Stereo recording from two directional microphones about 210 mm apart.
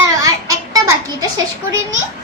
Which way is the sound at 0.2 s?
15° right (ahead or behind).